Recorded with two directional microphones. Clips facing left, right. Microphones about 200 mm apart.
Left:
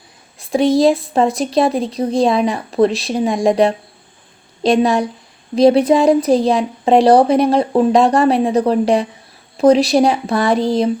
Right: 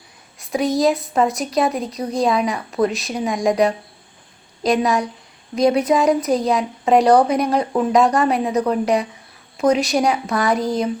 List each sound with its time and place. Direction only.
0.3 s speech: 30° left (ahead or behind)